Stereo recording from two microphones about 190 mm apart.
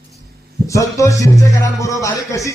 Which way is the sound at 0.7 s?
15° left (ahead or behind).